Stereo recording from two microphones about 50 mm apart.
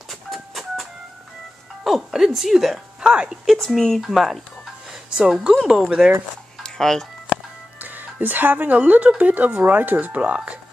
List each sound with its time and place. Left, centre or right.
0.1 s a sound: centre
1.9 s speech: centre
3.0 s speech: centre
3.7 s speech: centre
4.0 s speech: centre
5.1 s speech: centre
6.6 s music: centre
7.8 s music: right
8.7 s speech: right